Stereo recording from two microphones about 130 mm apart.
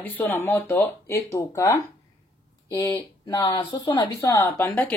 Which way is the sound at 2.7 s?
30° left (ahead or behind).